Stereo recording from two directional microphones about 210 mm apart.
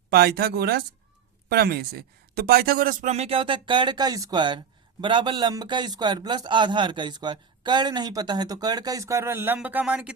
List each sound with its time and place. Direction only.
0.1 s speech: 50° right (ahead or behind); by 10.2 s 5° right (ahead or behind)